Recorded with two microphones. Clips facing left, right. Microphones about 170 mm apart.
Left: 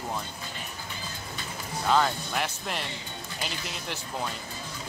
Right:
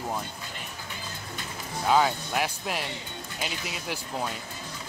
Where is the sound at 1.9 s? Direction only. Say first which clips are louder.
Right 2 dB; 5° right (ahead or behind).